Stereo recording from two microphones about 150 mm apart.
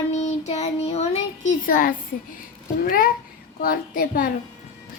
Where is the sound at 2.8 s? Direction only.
80° left.